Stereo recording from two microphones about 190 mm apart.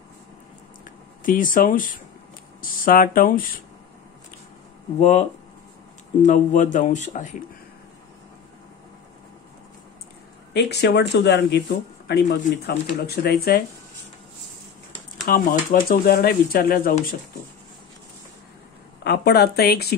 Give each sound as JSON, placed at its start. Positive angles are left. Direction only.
{"t": 0.8, "sound": "speech", "side_deg": 45}
{"t": 5.0, "sound": "speech", "side_deg": 35}
{"t": 10.5, "sound": "speech", "side_deg": 60}
{"t": 15.2, "sound": "speech", "side_deg": 50}
{"t": 19.0, "sound": "speech", "side_deg": 60}